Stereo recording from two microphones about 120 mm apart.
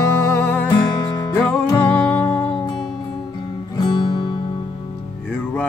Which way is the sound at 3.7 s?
35° left (ahead or behind).